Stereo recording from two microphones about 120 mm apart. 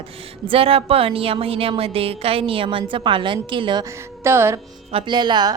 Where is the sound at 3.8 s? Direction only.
25° right (ahead or behind).